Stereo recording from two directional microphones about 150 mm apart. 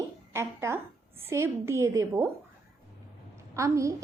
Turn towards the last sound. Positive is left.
turn(degrees=-20)  # may be behind; listen again after turning